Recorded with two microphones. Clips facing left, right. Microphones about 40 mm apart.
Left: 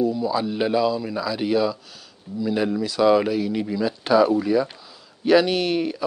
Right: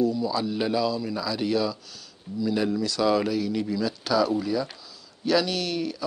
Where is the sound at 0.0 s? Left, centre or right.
Centre.